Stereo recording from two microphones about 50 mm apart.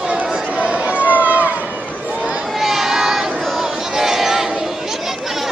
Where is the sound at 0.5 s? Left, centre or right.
Right.